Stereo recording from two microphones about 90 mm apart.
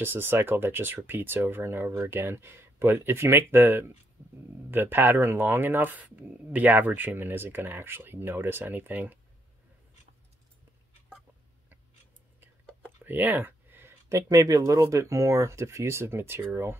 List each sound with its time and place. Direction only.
0.0 s speech: 25° right (ahead or behind)
12.8 s a sound: 20° right (ahead or behind)
14.3 s speech: 40° right (ahead or behind)